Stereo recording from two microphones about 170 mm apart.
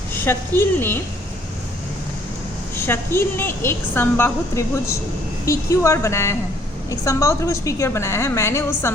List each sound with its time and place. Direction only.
0.1 s a woman's voice: 15° left (ahead or behind)
2.7 s a woman's voice: 15° left (ahead or behind)